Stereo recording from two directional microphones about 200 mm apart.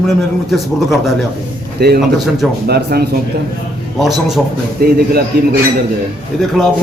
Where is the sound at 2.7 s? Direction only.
50° right (ahead or behind).